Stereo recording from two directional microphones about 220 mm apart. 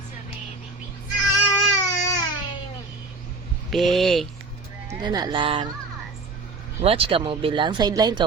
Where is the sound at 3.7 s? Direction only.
Centre (ahead or behind).